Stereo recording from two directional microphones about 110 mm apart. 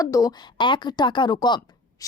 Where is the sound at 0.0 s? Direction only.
35° left (ahead or behind).